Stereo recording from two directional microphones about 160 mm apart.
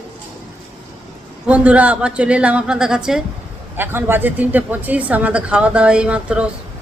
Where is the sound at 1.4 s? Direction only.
10° right (ahead or behind).